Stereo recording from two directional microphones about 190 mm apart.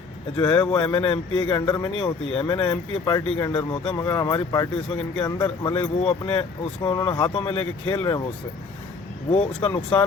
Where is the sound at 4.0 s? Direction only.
15° left (ahead or behind).